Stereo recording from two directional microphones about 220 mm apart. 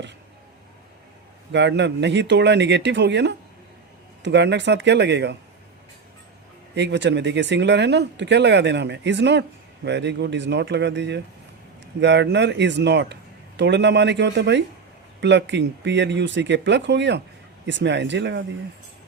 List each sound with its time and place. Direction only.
1.5 s speech: 50° right (ahead or behind)
6.7 s speech: 50° right (ahead or behind)